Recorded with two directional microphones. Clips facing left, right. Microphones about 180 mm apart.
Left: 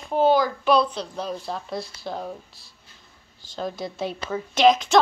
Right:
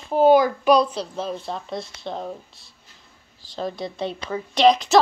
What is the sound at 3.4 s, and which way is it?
A woman's voice, centre (ahead or behind).